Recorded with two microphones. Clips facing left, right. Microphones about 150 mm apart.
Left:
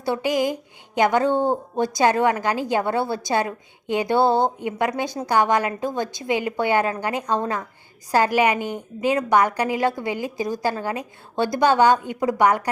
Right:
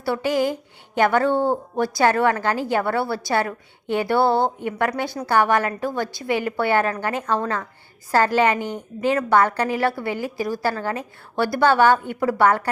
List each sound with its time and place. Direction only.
0.0 s a woman's voice: 15° left (ahead or behind)